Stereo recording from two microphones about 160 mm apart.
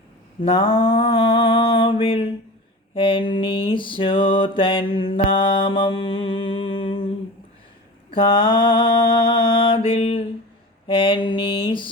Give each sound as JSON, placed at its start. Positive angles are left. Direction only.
{"t": 0.4, "sound": "a sound", "side_deg": 35}
{"t": 2.9, "sound": "mantra", "side_deg": 30}
{"t": 8.1, "sound": "mantra", "side_deg": 30}